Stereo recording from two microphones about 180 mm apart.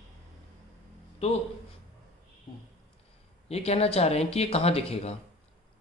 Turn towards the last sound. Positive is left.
turn(degrees=35)  # may be behind; listen again after turning